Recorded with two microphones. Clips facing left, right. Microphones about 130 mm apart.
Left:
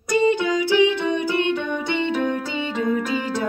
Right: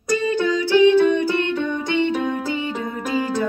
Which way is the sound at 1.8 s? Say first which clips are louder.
Right 1 dB; 15° right (ahead or behind).